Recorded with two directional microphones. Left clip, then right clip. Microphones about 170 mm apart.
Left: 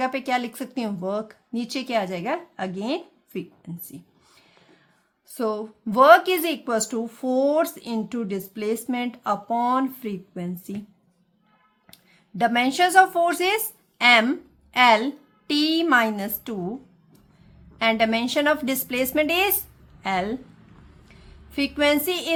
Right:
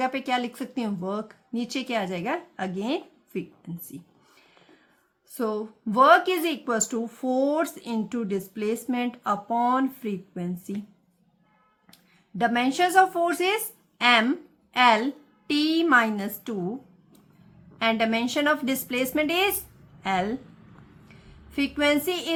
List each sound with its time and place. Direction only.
0.0 s speech: 30° left (ahead or behind)
5.3 s speech: 30° left (ahead or behind)
12.4 s a woman's voice: 30° left (ahead or behind)
17.7 s a woman's voice: 30° left (ahead or behind)
21.5 s speech: 30° left (ahead or behind)